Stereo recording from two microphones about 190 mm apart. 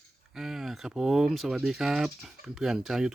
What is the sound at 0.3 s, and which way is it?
Speech, centre (ahead or behind).